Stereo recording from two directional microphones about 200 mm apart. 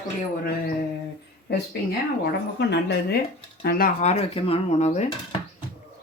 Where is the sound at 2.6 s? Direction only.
55° left (ahead or behind).